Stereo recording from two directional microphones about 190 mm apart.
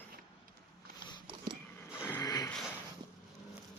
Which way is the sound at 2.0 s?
15° left (ahead or behind).